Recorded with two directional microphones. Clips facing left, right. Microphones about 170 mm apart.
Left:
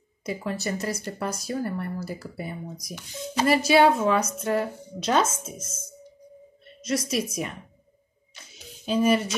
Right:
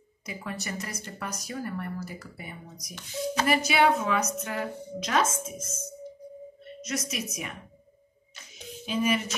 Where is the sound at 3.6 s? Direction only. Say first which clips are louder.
Left 7 dB; 30° left (ahead or behind).